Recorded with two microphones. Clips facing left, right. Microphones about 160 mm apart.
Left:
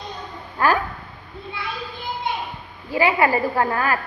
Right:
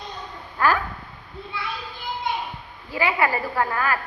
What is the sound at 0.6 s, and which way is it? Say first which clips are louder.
Speech: left 2 dB; 15° left (ahead or behind).